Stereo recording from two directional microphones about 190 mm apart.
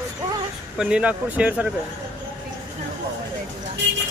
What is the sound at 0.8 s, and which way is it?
Speech, 5° right (ahead or behind).